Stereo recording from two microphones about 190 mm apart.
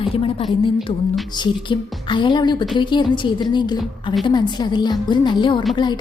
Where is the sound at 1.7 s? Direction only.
25° left (ahead or behind).